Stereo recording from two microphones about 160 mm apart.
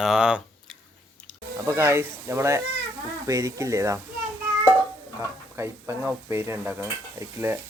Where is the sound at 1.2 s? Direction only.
5° left (ahead or behind).